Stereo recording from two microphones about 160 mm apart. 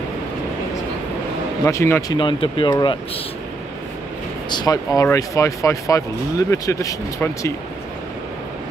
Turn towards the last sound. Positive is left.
turn(degrees=20)  # may be behind; listen again after turning